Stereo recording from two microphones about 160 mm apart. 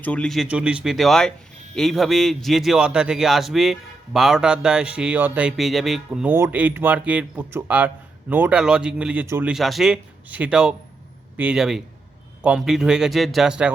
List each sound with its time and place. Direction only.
0.0 s a man's voice: 5° left (ahead or behind); by 9.5 s 15° right (ahead or behind)
9.5 s a man's voice: centre (ahead or behind)